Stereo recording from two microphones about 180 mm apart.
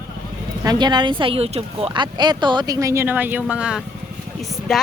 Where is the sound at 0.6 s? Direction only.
25° right (ahead or behind).